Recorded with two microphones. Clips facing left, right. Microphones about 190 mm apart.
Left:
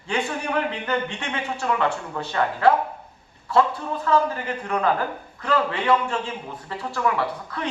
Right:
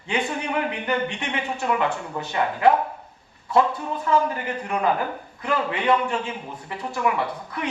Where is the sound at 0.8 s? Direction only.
15° right (ahead or behind).